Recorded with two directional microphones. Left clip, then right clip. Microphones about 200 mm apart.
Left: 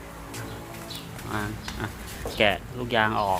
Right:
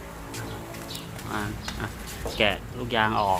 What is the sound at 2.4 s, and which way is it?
Speech, 15° left (ahead or behind).